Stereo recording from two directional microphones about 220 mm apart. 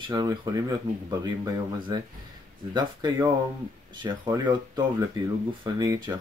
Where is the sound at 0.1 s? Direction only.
20° right (ahead or behind).